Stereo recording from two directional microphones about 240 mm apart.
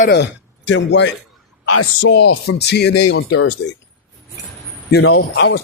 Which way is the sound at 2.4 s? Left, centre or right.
Left.